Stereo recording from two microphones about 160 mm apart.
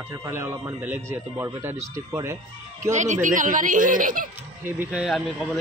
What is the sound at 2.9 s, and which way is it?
Speech, 50° right (ahead or behind).